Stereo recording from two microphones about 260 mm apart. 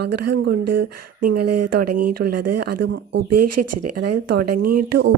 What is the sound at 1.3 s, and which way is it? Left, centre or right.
Speech, right.